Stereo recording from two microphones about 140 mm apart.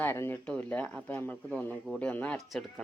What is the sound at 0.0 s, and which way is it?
Speech, 15° left (ahead or behind).